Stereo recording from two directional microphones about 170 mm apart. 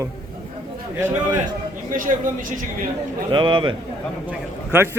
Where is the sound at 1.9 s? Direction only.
50° right (ahead or behind).